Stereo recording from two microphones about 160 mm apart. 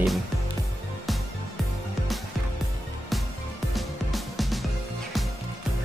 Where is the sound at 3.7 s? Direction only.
Centre (ahead or behind).